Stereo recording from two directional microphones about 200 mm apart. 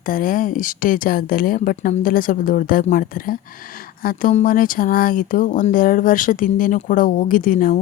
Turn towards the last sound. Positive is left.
turn(degrees=45)  # may be behind; listen again after turning